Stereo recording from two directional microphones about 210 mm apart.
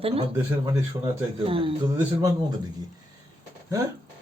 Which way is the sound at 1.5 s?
25° right (ahead or behind).